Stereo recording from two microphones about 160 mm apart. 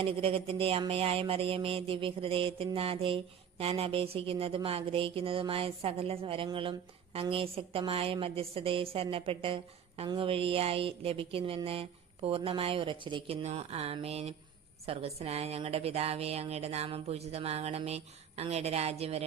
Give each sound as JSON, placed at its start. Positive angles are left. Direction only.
{"t": 0.0, "sound": "speech", "side_deg": -35}